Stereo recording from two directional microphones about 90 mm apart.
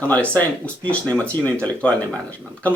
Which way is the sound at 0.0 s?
15° left (ahead or behind).